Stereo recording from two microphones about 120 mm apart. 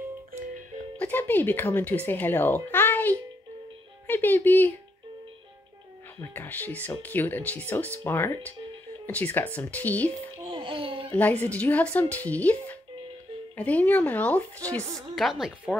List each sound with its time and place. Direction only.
0.9 s speech: 15° left (ahead or behind)
6.3 s speech: 15° left (ahead or behind)
10.5 s a sound: 45° right (ahead or behind)
11.1 s speech: 15° left (ahead or behind)
15.1 s speech: centre (ahead or behind)